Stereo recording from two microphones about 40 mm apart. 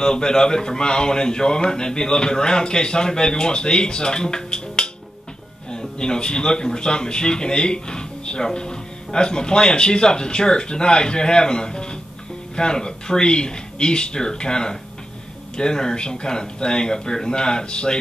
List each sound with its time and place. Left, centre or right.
0.0 s speech: centre